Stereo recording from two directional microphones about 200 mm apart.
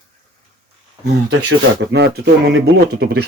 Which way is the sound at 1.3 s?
60° right (ahead or behind).